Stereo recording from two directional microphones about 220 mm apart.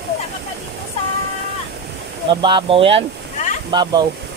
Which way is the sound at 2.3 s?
20° right (ahead or behind).